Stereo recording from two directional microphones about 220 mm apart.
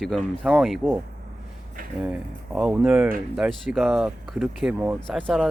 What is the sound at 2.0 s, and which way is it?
Speech, 5° right (ahead or behind).